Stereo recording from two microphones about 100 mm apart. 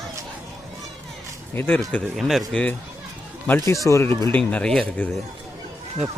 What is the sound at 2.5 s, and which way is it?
Speech, 10° left (ahead or behind).